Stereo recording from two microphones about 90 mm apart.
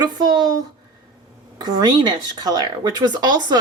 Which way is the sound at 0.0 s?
50° right (ahead or behind).